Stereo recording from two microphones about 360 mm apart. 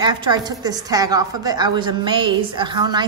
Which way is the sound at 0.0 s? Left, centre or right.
Centre.